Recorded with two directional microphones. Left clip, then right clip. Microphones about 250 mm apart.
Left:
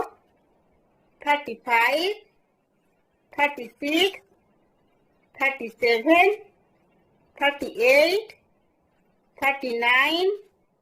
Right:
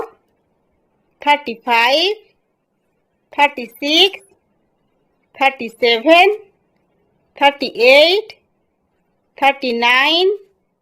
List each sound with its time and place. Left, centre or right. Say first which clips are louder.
1.2 s a woman's voice: right 9 dB; right
3.2 s a woman's voice: right 9 dB; right
5.3 s a woman's voice: right 9 dB; right
7.3 s a woman's voice: right 10 dB; right